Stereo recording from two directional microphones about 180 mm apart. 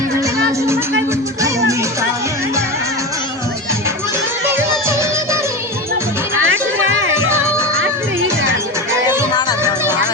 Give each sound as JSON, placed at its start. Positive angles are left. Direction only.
{"t": 4.5, "sound": "music", "side_deg": -15}
{"t": 5.9, "sound": "music", "side_deg": -90}
{"t": 7.3, "sound": "music", "side_deg": -15}
{"t": 7.8, "sound": "music", "side_deg": -90}